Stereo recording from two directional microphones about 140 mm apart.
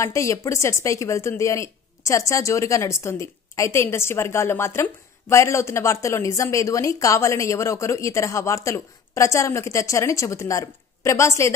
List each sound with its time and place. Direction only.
0.0 s a woman's voice: 20° left (ahead or behind)